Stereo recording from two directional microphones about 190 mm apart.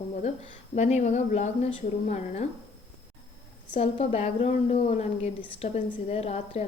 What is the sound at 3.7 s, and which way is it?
A woman's voice, 35° left (ahead or behind).